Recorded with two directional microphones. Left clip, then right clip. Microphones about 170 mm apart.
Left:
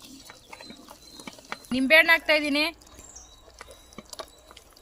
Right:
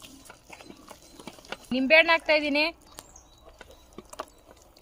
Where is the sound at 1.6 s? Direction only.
45° right (ahead or behind).